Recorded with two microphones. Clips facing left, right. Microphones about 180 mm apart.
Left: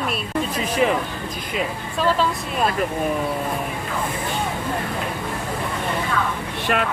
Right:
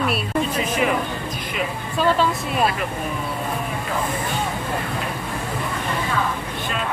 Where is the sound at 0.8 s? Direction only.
35° left (ahead or behind).